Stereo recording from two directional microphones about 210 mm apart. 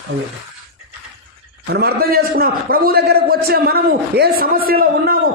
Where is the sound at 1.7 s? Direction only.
50° right (ahead or behind).